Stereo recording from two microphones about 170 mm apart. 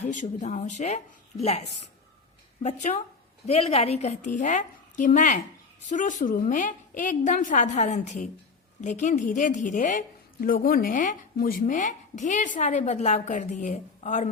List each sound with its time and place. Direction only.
0.0 s speech: 45° left (ahead or behind)